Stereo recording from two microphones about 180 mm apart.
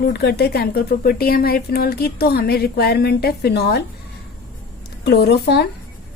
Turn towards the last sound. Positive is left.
turn(degrees=65)  # may be behind; listen again after turning